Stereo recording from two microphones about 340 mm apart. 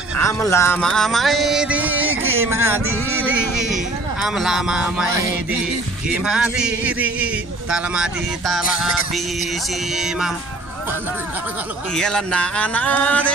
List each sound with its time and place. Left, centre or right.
0.2 s speech: centre
2.3 s a sound: centre
3.3 s speech: centre
11.9 s speech: centre